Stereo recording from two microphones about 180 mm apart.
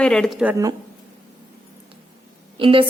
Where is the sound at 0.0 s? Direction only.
5° left (ahead or behind).